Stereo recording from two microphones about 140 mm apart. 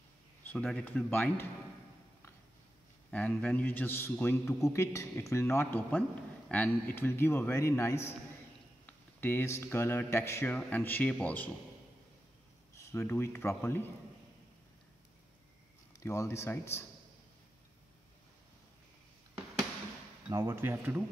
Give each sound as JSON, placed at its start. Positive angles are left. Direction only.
{"t": 0.4, "sound": "speech", "side_deg": 10}
{"t": 3.1, "sound": "a man's voice", "side_deg": 10}
{"t": 12.7, "sound": "speech", "side_deg": 15}
{"t": 16.0, "sound": "a man's voice", "side_deg": 20}
{"t": 20.2, "sound": "speech", "side_deg": -20}